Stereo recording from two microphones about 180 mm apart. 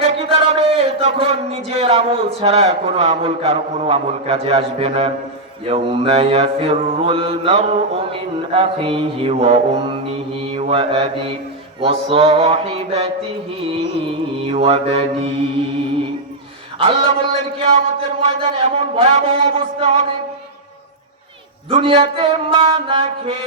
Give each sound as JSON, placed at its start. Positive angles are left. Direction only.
{"t": 0.0, "sound": "a man's voice", "side_deg": -35}
{"t": 10.4, "sound": "mantra", "side_deg": -30}
{"t": 11.8, "sound": "a man's voice", "side_deg": -30}
{"t": 16.7, "sound": "a man's voice", "side_deg": -30}
{"t": 21.7, "sound": "a man's voice", "side_deg": -30}